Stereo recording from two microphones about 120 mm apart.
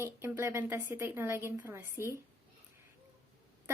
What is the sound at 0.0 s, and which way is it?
A woman's voice, 20° right (ahead or behind).